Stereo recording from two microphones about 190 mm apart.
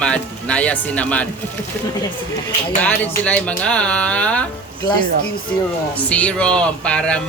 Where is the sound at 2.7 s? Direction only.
10° left (ahead or behind).